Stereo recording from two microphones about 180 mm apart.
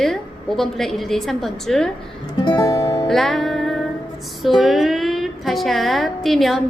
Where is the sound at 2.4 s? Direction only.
25° left (ahead or behind).